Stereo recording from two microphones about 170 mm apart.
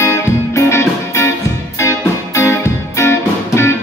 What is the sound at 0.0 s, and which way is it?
Music, 15° left (ahead or behind).